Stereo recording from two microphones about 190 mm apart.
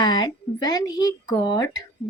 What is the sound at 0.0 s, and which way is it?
Speech, 20° left (ahead or behind).